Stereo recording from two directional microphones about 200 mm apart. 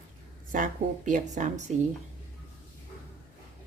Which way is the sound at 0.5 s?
40° right (ahead or behind).